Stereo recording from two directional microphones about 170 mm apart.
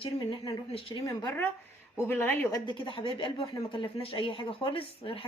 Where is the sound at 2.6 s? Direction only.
30° left (ahead or behind).